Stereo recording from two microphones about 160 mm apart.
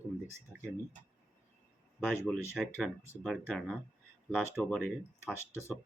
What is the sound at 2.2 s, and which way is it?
Speech, centre (ahead or behind).